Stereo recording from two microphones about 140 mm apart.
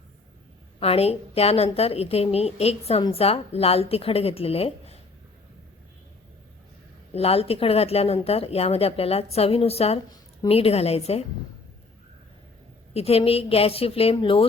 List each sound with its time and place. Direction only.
0.8 s a woman's voice: 45° left (ahead or behind)
7.1 s a woman's voice: 45° left (ahead or behind)
12.9 s a woman's voice: 45° left (ahead or behind)